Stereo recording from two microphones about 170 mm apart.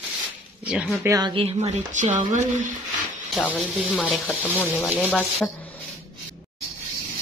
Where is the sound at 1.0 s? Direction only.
25° right (ahead or behind); by 2.7 s 45° right (ahead or behind).